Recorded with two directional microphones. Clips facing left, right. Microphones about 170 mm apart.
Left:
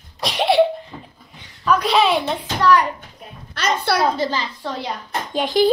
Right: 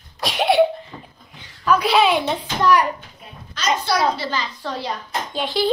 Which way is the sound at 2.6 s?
15° right (ahead or behind).